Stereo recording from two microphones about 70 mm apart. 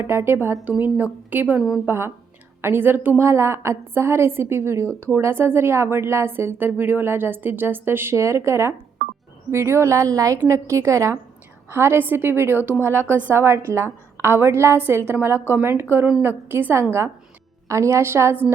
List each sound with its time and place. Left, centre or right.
0.0 s a woman's voice: right
1.9 s a woman's voice: right
3.2 s a woman's voice: right
8.1 s a woman's voice: right
15.5 s a woman's voice: right
17.7 s a woman's voice: right